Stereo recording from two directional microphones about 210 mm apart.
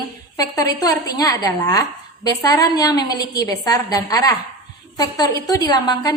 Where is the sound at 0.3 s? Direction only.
15° left (ahead or behind).